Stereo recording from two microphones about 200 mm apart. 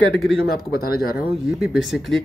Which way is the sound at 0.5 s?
50° left (ahead or behind).